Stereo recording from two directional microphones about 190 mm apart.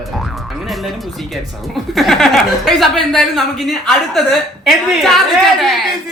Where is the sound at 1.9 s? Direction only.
Centre (ahead or behind).